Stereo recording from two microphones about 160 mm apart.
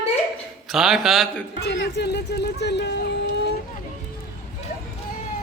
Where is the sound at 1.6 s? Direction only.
90° left.